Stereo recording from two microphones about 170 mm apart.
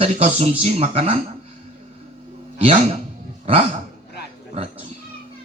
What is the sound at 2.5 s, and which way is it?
Speech, 40° right (ahead or behind).